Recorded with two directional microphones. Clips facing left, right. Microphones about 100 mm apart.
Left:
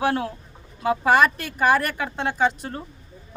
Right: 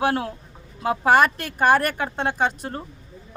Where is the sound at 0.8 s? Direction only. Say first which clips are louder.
Right 1 dB; 45° right (ahead or behind).